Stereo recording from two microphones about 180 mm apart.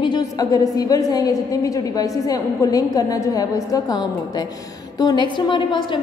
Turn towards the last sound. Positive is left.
turn(degrees=25)  # may be behind; listen again after turning